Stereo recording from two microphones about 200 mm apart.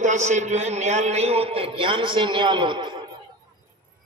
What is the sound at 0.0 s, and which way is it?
A man's voice, 35° right (ahead or behind).